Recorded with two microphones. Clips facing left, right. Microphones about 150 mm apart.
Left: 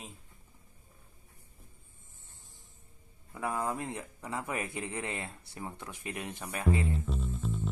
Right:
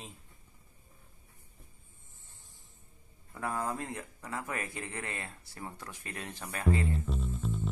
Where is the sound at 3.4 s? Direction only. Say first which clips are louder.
Left 1 dB; 20° left (ahead or behind).